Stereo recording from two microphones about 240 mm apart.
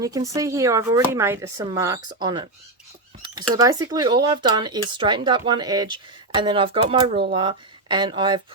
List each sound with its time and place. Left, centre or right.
0.0 s speech: centre
3.5 s speech: centre